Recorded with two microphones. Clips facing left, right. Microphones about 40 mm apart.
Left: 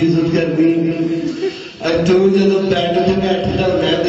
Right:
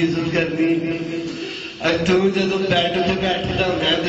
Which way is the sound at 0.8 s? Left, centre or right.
Centre.